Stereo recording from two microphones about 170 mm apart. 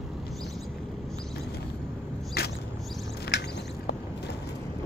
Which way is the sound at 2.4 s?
70° left (ahead or behind).